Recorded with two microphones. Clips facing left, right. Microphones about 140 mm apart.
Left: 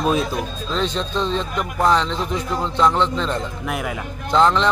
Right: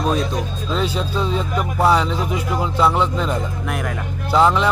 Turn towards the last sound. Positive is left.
turn(degrees=-10)  # may be behind; listen again after turning